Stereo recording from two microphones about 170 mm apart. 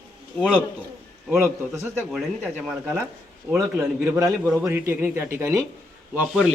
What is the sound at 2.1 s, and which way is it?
A man's voice, 5° right (ahead or behind).